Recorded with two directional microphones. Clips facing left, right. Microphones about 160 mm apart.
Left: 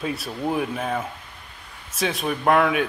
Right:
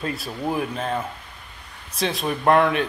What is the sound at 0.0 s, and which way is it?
A woman's voice, centre (ahead or behind).